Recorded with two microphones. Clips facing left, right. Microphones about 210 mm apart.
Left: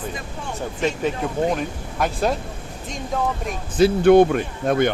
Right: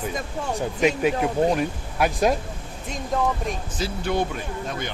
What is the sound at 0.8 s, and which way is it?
Speech, 10° right (ahead or behind).